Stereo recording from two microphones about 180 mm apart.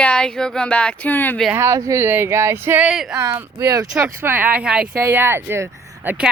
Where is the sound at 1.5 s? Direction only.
15° right (ahead or behind).